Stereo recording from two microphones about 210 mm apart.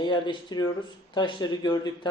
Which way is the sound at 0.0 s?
20° left (ahead or behind).